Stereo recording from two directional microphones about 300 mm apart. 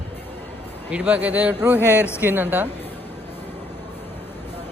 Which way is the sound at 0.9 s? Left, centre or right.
Centre.